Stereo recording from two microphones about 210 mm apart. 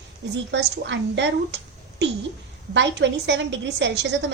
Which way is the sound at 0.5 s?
60° right (ahead or behind).